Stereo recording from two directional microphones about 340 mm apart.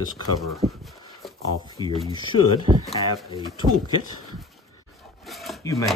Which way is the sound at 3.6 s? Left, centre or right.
Right.